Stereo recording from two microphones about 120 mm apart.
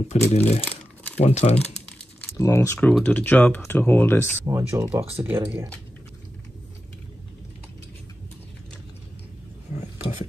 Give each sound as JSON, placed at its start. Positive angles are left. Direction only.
{"t": 0.1, "sound": "speech", "side_deg": 65}
{"t": 0.7, "sound": "crumpling", "side_deg": 15}
{"t": 1.2, "sound": "speech", "side_deg": 60}
{"t": 2.3, "sound": "speech", "side_deg": 25}
{"t": 4.5, "sound": "speech", "side_deg": -25}